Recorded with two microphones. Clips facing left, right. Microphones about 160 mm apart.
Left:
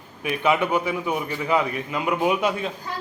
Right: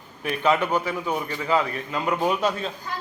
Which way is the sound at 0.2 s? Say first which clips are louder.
Even; 10° left (ahead or behind).